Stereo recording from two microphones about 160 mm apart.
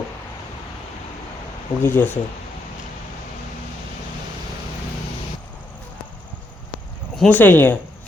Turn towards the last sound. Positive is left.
turn(degrees=10)  # may be behind; listen again after turning